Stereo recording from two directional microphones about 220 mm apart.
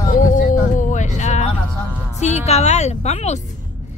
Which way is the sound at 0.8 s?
35° left (ahead or behind).